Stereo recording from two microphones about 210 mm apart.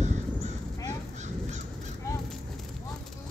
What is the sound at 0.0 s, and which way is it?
Crow, 35° right (ahead or behind).